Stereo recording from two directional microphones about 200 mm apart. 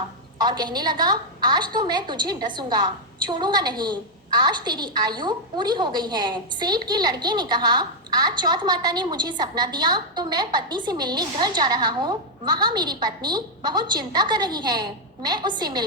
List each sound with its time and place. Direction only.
0.4 s a woman's voice: 20° right (ahead or behind)